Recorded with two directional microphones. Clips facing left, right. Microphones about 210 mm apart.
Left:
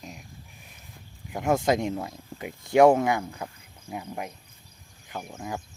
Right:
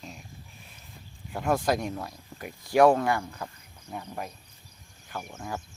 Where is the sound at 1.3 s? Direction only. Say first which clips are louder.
Left 3 dB; 20° left (ahead or behind).